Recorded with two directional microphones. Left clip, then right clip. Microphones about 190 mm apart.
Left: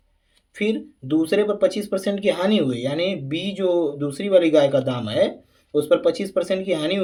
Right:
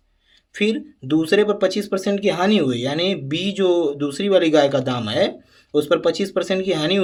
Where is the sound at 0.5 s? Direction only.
35° right (ahead or behind).